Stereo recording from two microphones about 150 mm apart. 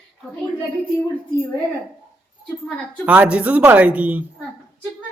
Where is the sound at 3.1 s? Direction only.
10° right (ahead or behind).